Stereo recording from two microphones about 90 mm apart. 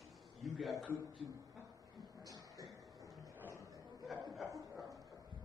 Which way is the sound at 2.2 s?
45° right (ahead or behind).